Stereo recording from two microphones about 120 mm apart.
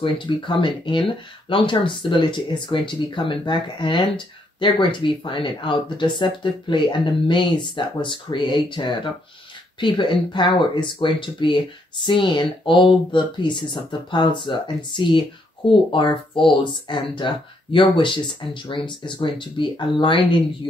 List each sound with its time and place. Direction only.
0.0 s speech: 40° left (ahead or behind)